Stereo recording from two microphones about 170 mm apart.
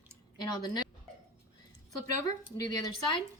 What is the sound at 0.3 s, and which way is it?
Speech, 25° left (ahead or behind).